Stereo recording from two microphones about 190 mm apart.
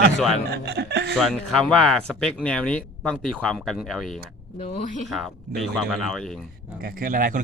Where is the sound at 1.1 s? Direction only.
Centre (ahead or behind).